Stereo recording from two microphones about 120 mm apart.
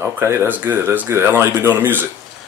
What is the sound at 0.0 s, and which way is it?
Speech, 20° right (ahead or behind).